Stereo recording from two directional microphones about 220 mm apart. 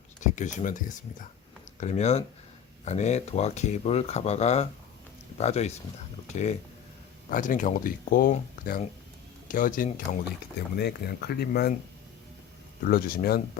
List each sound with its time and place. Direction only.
0.2 s speech: 35° left (ahead or behind)
12.8 s speech: 40° left (ahead or behind)